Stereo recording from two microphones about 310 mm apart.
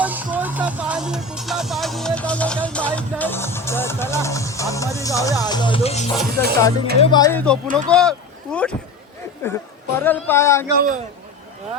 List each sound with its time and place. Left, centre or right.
0.0 s music: centre
5.4 s speech: centre
6.3 s music: right
7.0 s speech: centre
10.8 s a man's voice: right